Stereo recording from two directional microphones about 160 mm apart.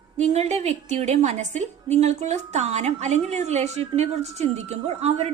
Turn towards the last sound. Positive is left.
turn(degrees=-45)  # may be behind; listen again after turning